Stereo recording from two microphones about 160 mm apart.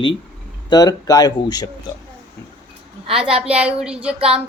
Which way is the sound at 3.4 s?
5° right (ahead or behind).